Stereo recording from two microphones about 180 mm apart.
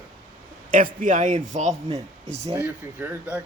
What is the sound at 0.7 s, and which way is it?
A man's voice, 50° right (ahead or behind).